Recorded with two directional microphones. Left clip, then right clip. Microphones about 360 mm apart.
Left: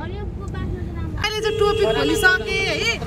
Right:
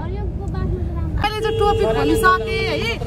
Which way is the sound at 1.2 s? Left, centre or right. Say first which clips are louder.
Right 1 dB; centre.